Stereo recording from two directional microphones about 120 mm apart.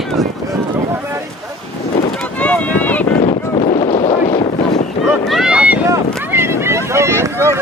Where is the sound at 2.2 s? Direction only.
10° left (ahead or behind).